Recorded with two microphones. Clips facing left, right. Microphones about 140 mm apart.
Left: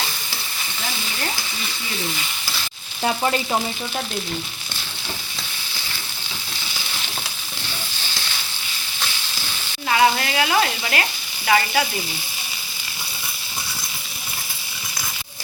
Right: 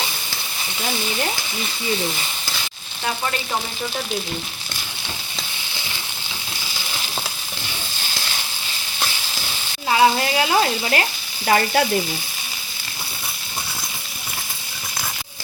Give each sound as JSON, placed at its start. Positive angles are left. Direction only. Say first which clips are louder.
{"t": 9.9, "sound": "frying", "louder": "right 2 dB", "side_deg": -25}
{"t": 11.4, "sound": "frying", "louder": "right 1 dB", "side_deg": -45}